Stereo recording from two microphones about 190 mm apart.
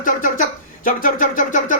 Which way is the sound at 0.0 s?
45° left (ahead or behind).